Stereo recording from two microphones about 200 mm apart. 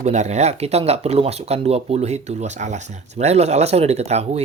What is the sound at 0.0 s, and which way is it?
Speech, 35° right (ahead or behind).